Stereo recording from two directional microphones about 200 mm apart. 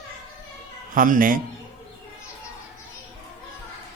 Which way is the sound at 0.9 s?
45° right (ahead or behind).